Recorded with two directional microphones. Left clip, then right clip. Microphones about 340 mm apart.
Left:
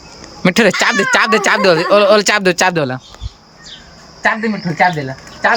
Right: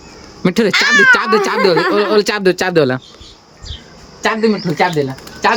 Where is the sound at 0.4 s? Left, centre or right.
Centre.